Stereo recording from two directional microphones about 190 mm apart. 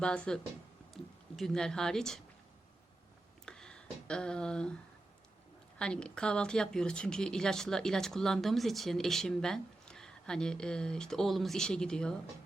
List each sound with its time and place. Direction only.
0.0 s a woman's voice: 5° left (ahead or behind)
1.4 s a woman's voice: centre (ahead or behind)
3.4 s a sound: 5° left (ahead or behind)
5.8 s a woman's voice: 5° left (ahead or behind)